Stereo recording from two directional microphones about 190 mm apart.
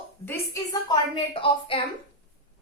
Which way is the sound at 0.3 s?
15° left (ahead or behind).